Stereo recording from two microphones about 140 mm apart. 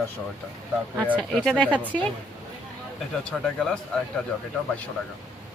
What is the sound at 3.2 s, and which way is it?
Speech, 5° left (ahead or behind).